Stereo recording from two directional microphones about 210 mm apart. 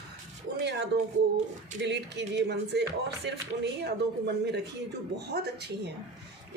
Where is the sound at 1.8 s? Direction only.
55° right (ahead or behind).